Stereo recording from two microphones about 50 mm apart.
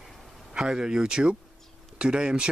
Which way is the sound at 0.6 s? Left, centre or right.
Centre.